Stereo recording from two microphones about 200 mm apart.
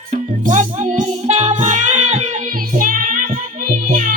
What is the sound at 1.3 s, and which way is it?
Music, 30° right (ahead or behind).